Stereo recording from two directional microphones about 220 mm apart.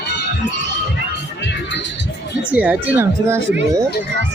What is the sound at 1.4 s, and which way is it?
Music, 55° left (ahead or behind).